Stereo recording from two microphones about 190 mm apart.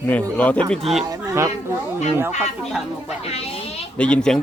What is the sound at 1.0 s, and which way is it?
Speech, 20° right (ahead or behind).